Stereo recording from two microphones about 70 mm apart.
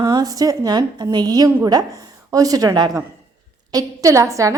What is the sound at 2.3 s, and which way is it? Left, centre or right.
Speech, right.